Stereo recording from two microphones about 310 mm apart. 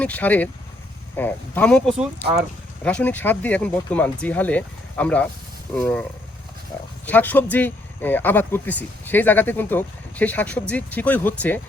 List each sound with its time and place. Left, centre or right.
0.0 s speech: centre